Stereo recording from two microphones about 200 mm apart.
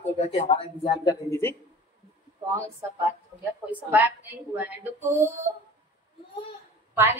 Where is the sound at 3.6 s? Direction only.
10° right (ahead or behind).